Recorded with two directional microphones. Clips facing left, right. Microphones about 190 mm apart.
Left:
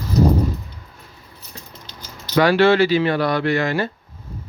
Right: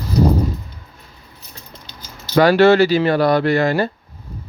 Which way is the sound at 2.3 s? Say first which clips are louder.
Right 3 dB; 40° right (ahead or behind).